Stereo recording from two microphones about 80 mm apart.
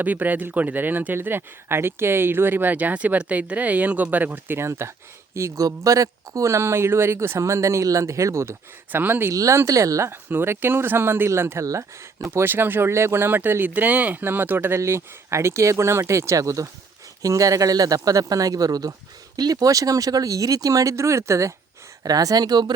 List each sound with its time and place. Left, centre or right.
0.0 s speech: right
5.6 s speech: right
9.3 s speech: right
10.1 s speech: right
22.0 s speech: right